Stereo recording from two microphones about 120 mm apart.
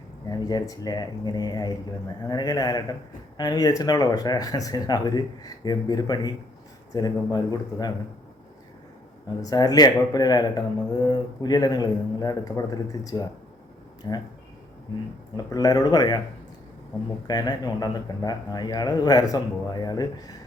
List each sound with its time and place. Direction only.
0.3 s speech: 35° left (ahead or behind)
9.4 s speech: 30° left (ahead or behind)
15.4 s speech: 30° left (ahead or behind)
17.2 s speech: 35° left (ahead or behind)